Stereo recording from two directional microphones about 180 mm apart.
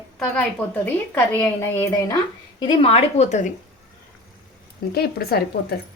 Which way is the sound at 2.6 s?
35° left (ahead or behind).